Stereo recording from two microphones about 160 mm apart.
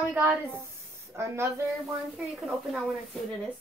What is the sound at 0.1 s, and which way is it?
A woman's voice, 10° right (ahead or behind).